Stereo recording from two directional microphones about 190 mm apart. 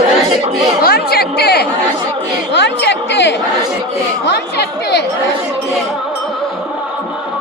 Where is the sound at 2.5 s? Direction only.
65° left (ahead or behind).